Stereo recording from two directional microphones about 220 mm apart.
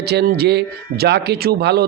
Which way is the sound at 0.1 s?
50° right (ahead or behind).